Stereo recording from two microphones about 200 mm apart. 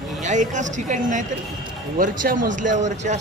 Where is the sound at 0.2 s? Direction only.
40° right (ahead or behind).